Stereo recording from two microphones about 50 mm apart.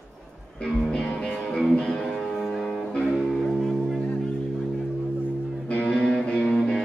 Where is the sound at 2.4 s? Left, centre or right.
Centre.